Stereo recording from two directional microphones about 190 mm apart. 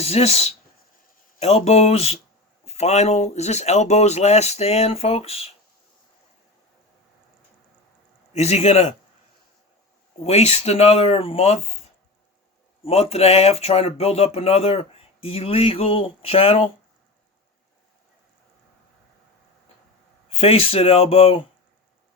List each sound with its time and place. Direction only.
0.0 s speech: 30° left (ahead or behind)
8.3 s speech: 35° left (ahead or behind)
10.2 s speech: 35° left (ahead or behind)
12.8 s speech: 30° left (ahead or behind)
20.3 s speech: 30° left (ahead or behind)